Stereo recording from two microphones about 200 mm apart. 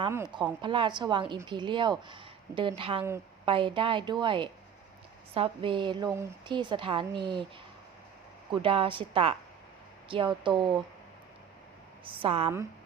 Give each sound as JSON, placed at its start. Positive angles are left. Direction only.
{"t": 0.1, "sound": "a woman's voice", "side_deg": -15}
{"t": 8.6, "sound": "a woman's voice", "side_deg": -25}
{"t": 12.0, "sound": "a woman's voice", "side_deg": -25}